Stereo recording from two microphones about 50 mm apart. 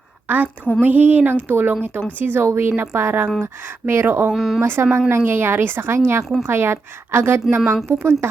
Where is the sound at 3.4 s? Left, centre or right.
Right.